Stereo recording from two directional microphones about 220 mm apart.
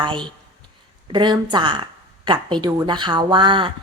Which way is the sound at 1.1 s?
20° right (ahead or behind).